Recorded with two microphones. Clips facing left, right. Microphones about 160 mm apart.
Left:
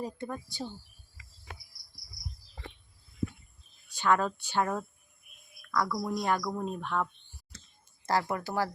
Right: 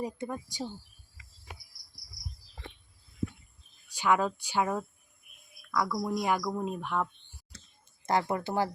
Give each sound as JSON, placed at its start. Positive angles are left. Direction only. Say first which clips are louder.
{"t": 0.0, "sound": "speech", "louder": "right 2 dB", "side_deg": -15}
{"t": 3.8, "sound": "speech", "louder": "even", "side_deg": -10}
{"t": 8.0, "sound": "speech", "louder": "right 1 dB", "side_deg": -25}